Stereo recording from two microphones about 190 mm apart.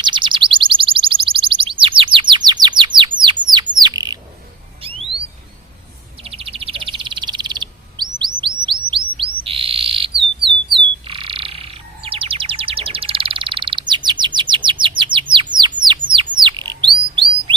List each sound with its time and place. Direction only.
0.0 s alarm: 25° right (ahead or behind)
4.8 s a sound: 30° right (ahead or behind)
6.2 s bird: 30° right (ahead or behind)